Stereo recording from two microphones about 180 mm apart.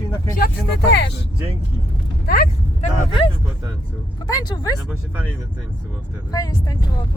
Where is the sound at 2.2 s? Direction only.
55° left (ahead or behind).